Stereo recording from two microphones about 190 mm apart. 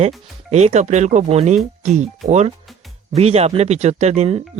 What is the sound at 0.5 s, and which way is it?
Speech, 35° right (ahead or behind).